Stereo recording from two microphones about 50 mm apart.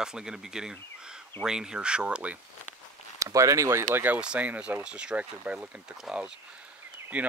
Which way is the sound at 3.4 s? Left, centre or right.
Right.